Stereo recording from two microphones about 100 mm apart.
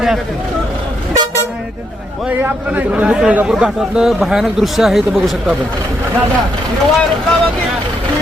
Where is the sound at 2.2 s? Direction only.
15° right (ahead or behind).